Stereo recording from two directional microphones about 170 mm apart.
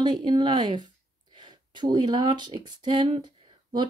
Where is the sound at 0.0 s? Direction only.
25° right (ahead or behind).